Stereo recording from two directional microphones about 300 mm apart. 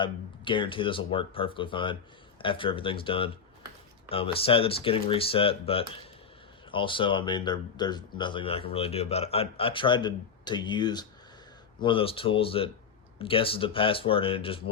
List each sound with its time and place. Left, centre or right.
0.0 s speech: centre